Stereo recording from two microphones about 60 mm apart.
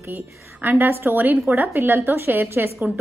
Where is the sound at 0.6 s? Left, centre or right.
Right.